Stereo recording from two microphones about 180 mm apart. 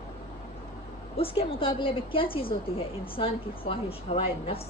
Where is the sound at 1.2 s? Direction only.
30° left (ahead or behind).